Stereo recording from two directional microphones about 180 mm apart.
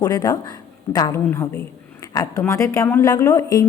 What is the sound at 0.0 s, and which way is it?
A woman's voice, 20° left (ahead or behind).